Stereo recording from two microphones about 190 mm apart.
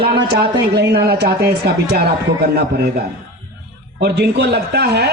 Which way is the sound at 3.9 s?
60° right (ahead or behind).